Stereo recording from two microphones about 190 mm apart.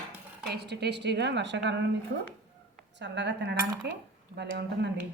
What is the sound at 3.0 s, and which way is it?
A woman's voice, 65° right (ahead or behind).